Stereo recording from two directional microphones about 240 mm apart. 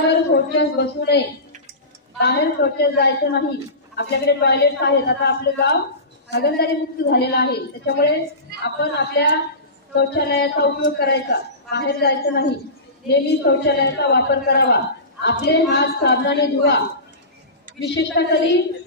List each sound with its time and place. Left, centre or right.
0.6 s a woman's voice: left